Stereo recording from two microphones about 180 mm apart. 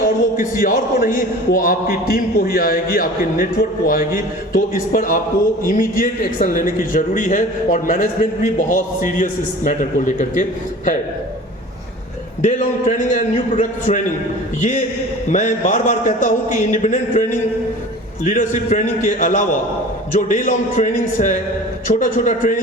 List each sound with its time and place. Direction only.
0.3 s a man's voice: 50° left (ahead or behind)
12.4 s a man's voice: 45° left (ahead or behind)